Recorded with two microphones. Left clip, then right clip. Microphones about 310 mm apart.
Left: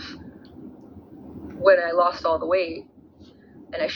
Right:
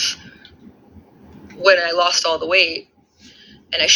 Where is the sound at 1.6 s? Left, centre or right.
Centre.